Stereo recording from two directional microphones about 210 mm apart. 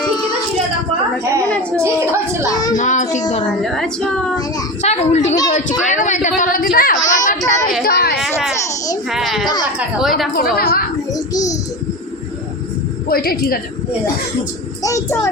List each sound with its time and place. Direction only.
0.1 s child singing: 20° left (ahead or behind)
1.7 s speech: 15° right (ahead or behind)
2.5 s child singing: 15° left (ahead or behind)
2.7 s child singing: 35° left (ahead or behind)
3.6 s speech: centre (ahead or behind)
4.8 s child singing: 30° left (ahead or behind)
5.5 s a sound: 35° left (ahead or behind)
7.9 s a sound: 50° left (ahead or behind)
9.0 s a sound: centre (ahead or behind)
10.3 s a woman's voice: 45° left (ahead or behind)
11.1 s a child's voice: 15° left (ahead or behind)
13.1 s a woman's voice: 45° left (ahead or behind)
14.8 s a child's voice: 15° left (ahead or behind)